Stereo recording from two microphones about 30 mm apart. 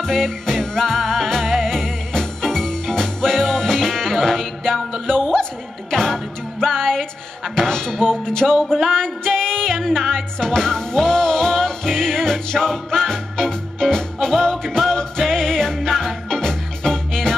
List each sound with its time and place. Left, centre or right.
0.0 s music: centre
9.8 s music: centre